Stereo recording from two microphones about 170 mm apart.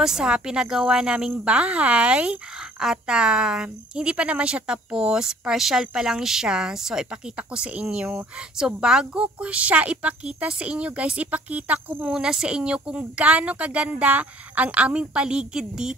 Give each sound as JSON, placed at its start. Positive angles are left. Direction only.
{"t": 0.0, "sound": "a woman's voice", "side_deg": -5}